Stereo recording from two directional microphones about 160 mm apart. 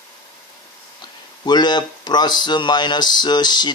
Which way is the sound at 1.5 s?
25° left (ahead or behind).